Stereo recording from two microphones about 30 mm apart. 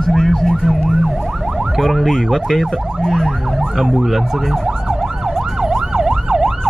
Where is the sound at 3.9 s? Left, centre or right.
Centre.